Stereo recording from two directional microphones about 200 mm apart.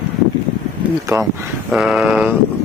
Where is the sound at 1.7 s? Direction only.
Centre (ahead or behind).